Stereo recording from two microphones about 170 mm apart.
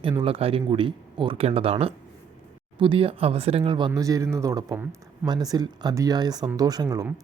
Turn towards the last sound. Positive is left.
turn(degrees=-20)  # may be behind; listen again after turning